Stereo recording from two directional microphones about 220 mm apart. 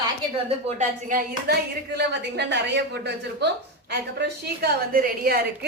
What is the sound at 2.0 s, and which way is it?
A woman's voice, 50° right (ahead or behind).